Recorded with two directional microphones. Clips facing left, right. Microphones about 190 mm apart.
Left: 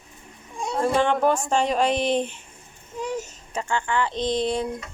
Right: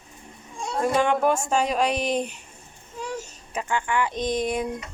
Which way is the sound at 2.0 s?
40° right (ahead or behind).